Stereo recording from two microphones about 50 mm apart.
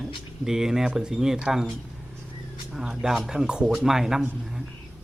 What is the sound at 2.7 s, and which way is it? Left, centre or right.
Speech, centre.